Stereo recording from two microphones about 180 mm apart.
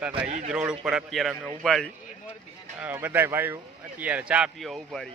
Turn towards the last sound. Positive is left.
turn(degrees=0)  # may be behind; listen again after turning